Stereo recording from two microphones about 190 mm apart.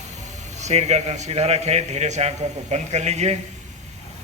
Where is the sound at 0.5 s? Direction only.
35° right (ahead or behind).